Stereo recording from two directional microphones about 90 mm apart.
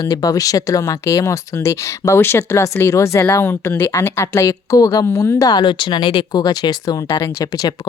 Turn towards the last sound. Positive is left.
turn(degrees=45)  # may be behind; listen again after turning